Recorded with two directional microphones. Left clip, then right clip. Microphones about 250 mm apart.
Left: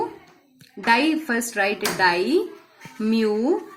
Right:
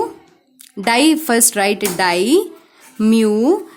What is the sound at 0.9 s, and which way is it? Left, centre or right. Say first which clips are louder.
A woman's voice: right 8 dB; right.